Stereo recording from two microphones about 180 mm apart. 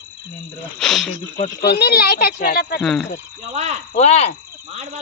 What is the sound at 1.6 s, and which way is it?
Speech, 65° left (ahead or behind).